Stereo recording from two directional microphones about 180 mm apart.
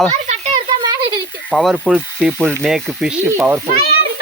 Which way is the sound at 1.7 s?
5° right (ahead or behind).